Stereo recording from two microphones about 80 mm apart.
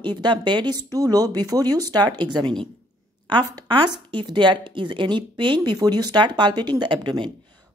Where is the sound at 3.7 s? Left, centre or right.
Right.